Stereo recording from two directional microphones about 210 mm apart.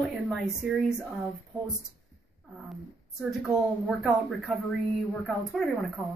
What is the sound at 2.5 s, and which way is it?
Speech, 5° right (ahead or behind).